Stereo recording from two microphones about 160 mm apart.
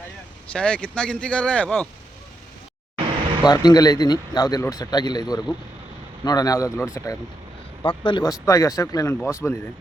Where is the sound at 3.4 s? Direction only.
25° left (ahead or behind).